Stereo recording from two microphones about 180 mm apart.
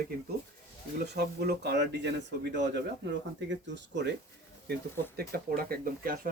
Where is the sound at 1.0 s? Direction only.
65° right (ahead or behind).